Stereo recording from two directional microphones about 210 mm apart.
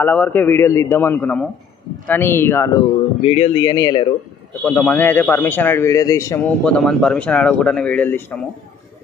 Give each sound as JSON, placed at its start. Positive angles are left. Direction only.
{"t": 0.0, "sound": "speech", "side_deg": 10}
{"t": 3.3, "sound": "speech", "side_deg": 30}
{"t": 4.6, "sound": "speech", "side_deg": 10}